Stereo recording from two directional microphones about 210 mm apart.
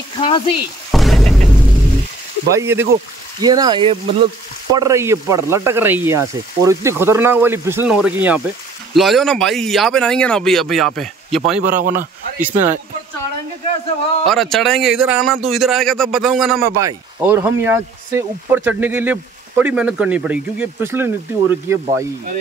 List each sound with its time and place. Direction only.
0.2 s speech: 25° left (ahead or behind)
0.9 s music: centre (ahead or behind)
2.5 s speech: 10° right (ahead or behind)
4.7 s speech: 15° right (ahead or behind)
11.6 s speech: 40° right (ahead or behind)
12.0 s speech: 10° right (ahead or behind)
14.2 s speech: centre (ahead or behind)
16.6 s speech: 15° right (ahead or behind)